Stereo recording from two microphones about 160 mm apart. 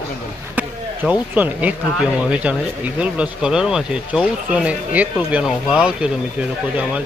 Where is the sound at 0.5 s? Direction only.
10° right (ahead or behind).